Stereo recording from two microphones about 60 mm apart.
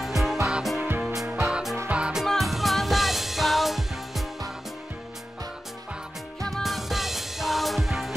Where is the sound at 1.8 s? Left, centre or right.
Centre.